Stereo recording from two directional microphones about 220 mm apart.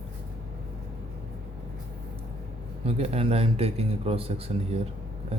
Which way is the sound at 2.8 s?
25° right (ahead or behind).